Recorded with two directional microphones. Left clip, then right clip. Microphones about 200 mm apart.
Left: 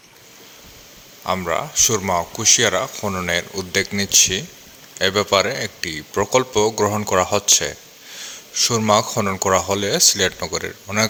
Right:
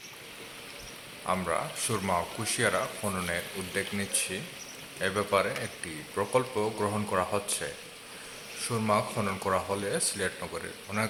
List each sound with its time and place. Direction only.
1.2 s a man's voice: 40° left (ahead or behind)